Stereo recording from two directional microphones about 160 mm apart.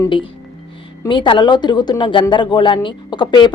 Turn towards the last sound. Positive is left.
turn(degrees=25)  # may be behind; listen again after turning